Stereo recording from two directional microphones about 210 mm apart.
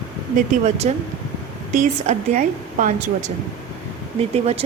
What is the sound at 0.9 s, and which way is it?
Speech, 35° right (ahead or behind).